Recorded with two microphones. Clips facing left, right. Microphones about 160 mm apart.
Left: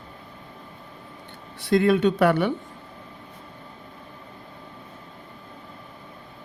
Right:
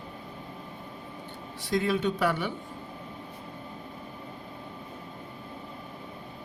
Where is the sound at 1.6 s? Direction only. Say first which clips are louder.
Left 8 dB; 65° left (ahead or behind).